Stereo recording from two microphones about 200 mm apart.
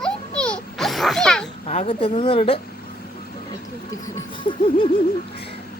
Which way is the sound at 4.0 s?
25° left (ahead or behind).